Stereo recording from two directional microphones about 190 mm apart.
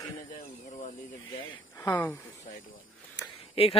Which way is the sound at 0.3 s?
40° left (ahead or behind).